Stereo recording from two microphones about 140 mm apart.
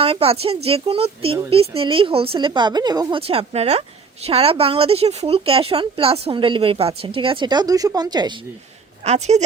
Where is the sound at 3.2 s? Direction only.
45° right (ahead or behind); by 8.3 s 30° right (ahead or behind).